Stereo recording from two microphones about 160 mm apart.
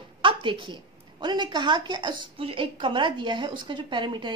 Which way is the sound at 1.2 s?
25° right (ahead or behind).